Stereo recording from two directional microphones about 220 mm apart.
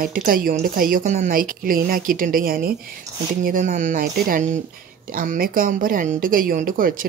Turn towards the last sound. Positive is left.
turn(degrees=-40)  # may be behind; listen again after turning